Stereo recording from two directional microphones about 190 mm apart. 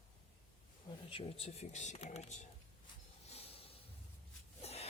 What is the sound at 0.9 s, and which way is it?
Speech, 30° left (ahead or behind).